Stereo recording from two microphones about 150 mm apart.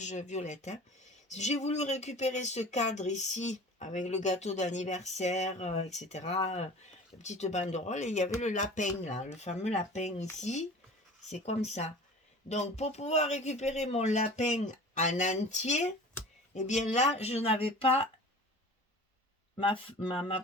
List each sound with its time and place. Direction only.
0.0 s speech: 50° left (ahead or behind)
19.5 s speech: 35° left (ahead or behind)